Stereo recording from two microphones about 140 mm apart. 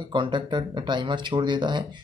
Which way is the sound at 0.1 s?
35° right (ahead or behind).